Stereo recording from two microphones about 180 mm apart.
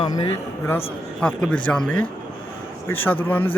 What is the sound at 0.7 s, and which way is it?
Speech, 10° left (ahead or behind).